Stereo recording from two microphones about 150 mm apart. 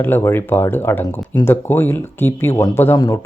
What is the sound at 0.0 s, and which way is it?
Speech, 15° left (ahead or behind).